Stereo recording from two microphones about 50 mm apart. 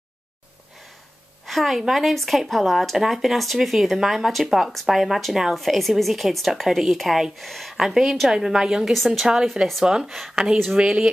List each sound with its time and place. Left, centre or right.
1.4 s a woman's voice: centre
8.9 s speech: centre
9.2 s a woman's voice: centre